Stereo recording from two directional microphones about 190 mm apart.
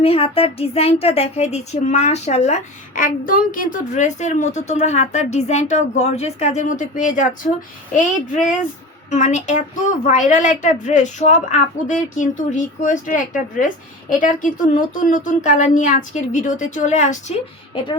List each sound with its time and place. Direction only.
0.0 s speech: 30° left (ahead or behind)